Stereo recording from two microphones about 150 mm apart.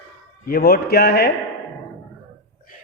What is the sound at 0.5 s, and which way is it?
Speech, 90° left.